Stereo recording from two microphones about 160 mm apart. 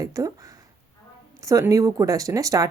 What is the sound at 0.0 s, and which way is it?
A woman's voice, 20° right (ahead or behind).